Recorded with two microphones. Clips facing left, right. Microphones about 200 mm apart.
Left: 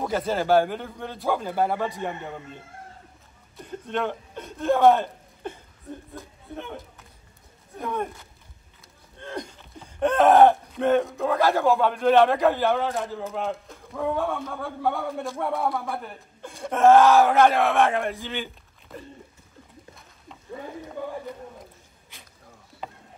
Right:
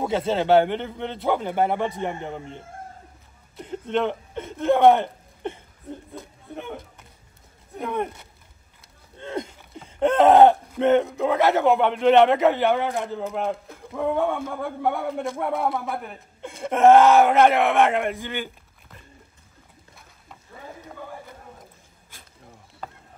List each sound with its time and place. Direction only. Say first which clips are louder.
0.1 s speech: right 2 dB; 25° right (ahead or behind)
3.8 s speech: right 4 dB; 20° right (ahead or behind)
6.5 s a sound: right 2 dB; 15° right (ahead or behind)
7.7 s speech: right 2 dB; 20° right (ahead or behind)
9.2 s a sound: right 4 dB; 25° right (ahead or behind)
9.8 s groan: right 2 dB; 25° right (ahead or behind)
10.8 s a woman's voice: right 3 dB; 25° right (ahead or behind)